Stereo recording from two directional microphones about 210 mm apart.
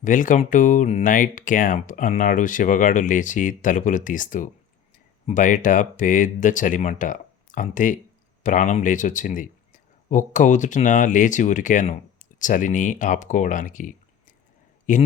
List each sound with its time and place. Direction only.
0.0 s speech: 40° left (ahead or behind)